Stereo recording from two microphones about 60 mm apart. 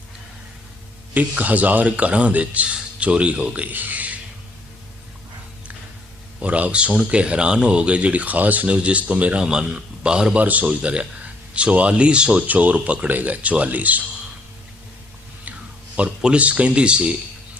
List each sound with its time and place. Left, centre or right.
1.1 s speech: right
6.4 s speech: right
10.4 s speech: right
15.5 s a sound: right
16.0 s speech: centre